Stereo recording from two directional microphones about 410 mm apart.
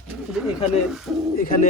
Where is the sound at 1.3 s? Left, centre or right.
Left.